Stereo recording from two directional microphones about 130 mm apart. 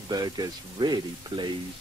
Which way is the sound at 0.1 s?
30° right (ahead or behind).